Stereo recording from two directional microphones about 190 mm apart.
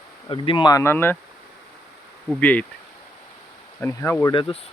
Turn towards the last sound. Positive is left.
turn(degrees=15)  # may be behind; listen again after turning